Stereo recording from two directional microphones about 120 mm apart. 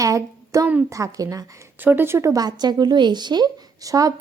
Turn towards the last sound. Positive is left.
turn(degrees=-30)  # may be behind; listen again after turning